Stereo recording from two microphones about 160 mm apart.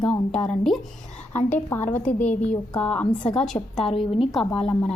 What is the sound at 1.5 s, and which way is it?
A woman's voice, 10° left (ahead or behind).